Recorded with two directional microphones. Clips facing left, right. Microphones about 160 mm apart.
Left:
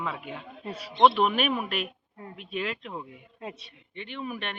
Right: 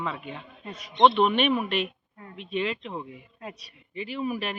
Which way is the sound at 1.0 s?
5° left (ahead or behind).